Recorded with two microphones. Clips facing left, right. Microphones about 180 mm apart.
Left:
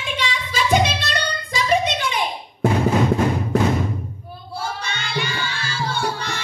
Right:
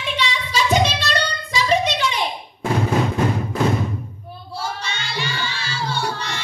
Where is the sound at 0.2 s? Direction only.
50° left (ahead or behind).